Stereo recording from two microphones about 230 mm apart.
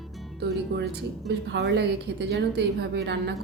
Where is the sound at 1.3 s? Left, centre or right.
Right.